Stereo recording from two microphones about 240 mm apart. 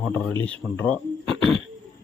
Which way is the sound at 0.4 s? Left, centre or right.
Centre.